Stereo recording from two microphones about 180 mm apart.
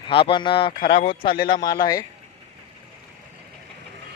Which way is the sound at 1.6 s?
20° left (ahead or behind).